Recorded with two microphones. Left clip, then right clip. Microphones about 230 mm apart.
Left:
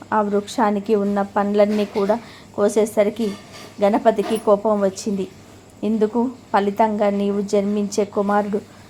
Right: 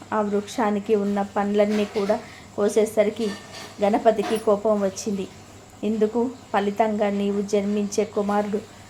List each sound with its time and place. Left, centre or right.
0.1 s a woman's voice: centre